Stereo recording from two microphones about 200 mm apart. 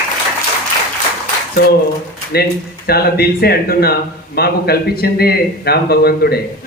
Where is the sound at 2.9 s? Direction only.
50° left (ahead or behind).